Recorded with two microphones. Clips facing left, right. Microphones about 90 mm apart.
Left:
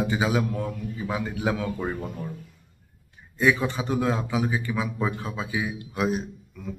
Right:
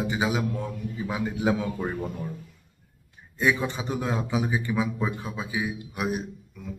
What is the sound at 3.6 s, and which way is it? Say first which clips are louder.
Speech: left 4 dB; 20° right (ahead or behind).